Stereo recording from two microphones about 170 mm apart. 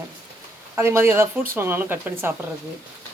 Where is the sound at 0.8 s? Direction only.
15° right (ahead or behind).